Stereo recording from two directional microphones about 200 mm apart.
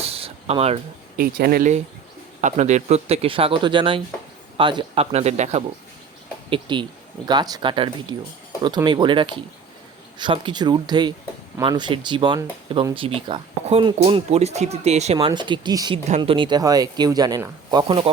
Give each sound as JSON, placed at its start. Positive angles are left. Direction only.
{"t": 0.0, "sound": "a sound", "side_deg": -30}
{"t": 1.1, "sound": "speech", "side_deg": -50}
{"t": 2.4, "sound": "speech", "side_deg": -35}
{"t": 16.0, "sound": "speech", "side_deg": -30}